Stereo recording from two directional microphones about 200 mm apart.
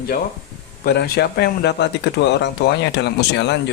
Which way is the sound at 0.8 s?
55° left (ahead or behind).